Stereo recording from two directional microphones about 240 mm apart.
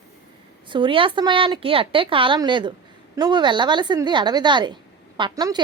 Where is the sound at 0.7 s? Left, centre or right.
Right.